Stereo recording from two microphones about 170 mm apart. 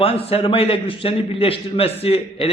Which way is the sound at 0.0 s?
35° left (ahead or behind).